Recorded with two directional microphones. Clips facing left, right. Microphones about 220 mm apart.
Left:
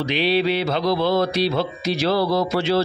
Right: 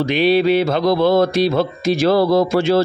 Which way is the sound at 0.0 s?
50° right (ahead or behind).